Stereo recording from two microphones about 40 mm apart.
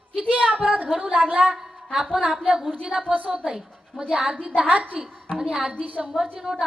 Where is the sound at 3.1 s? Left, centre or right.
Right.